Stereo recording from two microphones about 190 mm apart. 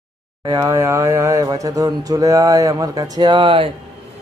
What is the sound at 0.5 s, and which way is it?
Speech, 25° right (ahead or behind).